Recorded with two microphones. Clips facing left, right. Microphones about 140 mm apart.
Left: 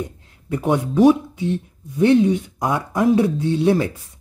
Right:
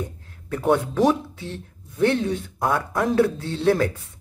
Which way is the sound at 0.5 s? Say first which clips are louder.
Left 1 dB; 15° left (ahead or behind).